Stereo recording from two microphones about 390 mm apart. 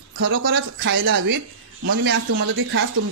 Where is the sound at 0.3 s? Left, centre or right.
Right.